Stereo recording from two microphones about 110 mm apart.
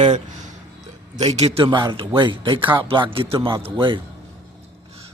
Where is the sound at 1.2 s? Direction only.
75° right (ahead or behind).